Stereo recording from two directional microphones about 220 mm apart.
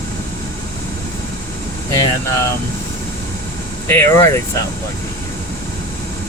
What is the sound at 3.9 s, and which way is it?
Speech, 15° left (ahead or behind).